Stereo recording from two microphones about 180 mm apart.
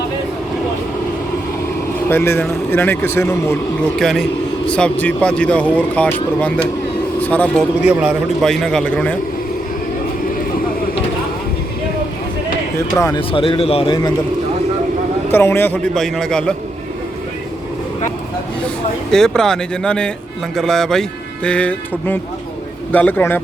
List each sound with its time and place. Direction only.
2.0 s a man's voice: 15° left (ahead or behind)
3.9 s a man's voice: centre (ahead or behind)
13.0 s a man's voice: 20° left (ahead or behind)
13.3 s a man's voice: 30° left (ahead or behind)
15.3 s a man's voice: 15° left (ahead or behind)
19.1 s a man's voice: 5° left (ahead or behind)